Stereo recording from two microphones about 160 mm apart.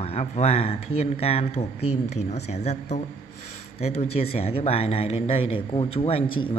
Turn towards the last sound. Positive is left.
turn(degrees=35)  # may be behind; listen again after turning